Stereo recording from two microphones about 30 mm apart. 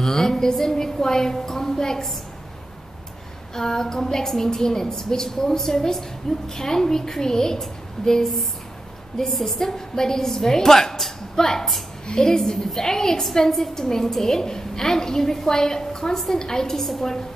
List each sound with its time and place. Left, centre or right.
0.0 s a woman's voice: centre
3.5 s a woman's voice: centre